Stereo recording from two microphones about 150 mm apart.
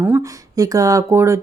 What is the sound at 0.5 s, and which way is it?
Speech, 25° right (ahead or behind).